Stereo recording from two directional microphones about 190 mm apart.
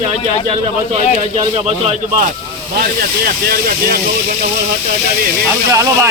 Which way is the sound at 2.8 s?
50° right (ahead or behind).